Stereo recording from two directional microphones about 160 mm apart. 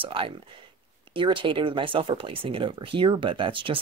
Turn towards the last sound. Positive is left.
turn(degrees=-30)  # may be behind; listen again after turning